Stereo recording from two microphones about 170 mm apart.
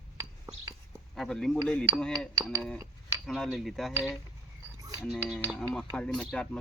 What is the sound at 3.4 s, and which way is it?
Speech, centre (ahead or behind).